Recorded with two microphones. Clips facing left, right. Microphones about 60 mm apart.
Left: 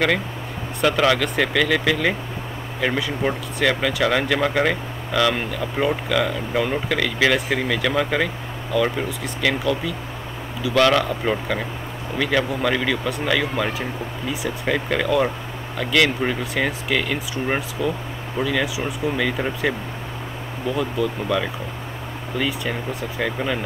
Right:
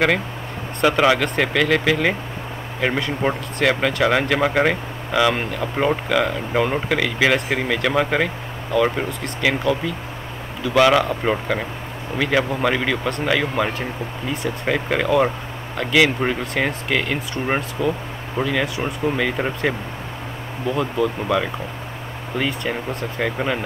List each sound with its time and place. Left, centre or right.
0.8 s speech: centre
3.2 s speech: right
3.6 s speech: centre
14.3 s speech: centre
14.7 s speech: centre
20.7 s speech: centre
22.3 s speech: right
23.2 s speech: centre